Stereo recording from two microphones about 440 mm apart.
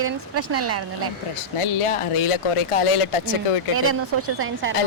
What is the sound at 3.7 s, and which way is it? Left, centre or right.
Speech, right.